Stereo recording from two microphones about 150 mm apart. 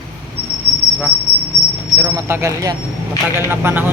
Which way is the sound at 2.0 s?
20° right (ahead or behind).